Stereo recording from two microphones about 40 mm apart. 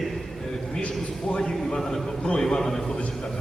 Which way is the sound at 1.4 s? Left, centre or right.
Centre.